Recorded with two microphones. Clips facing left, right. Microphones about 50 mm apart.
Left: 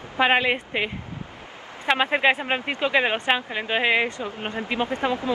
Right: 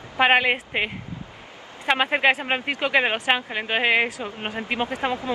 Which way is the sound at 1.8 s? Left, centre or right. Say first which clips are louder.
Even; centre.